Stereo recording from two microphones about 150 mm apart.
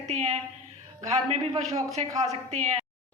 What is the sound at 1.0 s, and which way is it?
A woman's voice, 45° right (ahead or behind).